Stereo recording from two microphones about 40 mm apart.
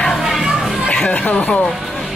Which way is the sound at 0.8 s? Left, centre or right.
Left.